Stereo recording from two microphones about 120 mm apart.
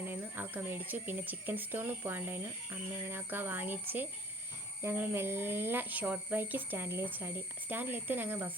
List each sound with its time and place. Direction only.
0.0 s speech: 15° right (ahead or behind)